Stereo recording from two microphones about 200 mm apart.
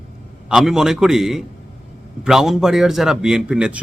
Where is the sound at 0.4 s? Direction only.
5° right (ahead or behind).